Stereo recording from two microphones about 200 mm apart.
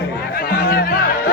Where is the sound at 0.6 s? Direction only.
50° left (ahead or behind).